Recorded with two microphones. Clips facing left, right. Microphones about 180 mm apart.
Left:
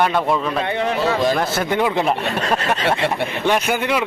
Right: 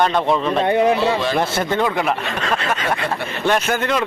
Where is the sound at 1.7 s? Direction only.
15° left (ahead or behind).